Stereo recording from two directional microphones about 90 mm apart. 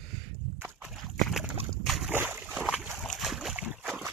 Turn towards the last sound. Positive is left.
turn(degrees=-5)  # may be behind; listen again after turning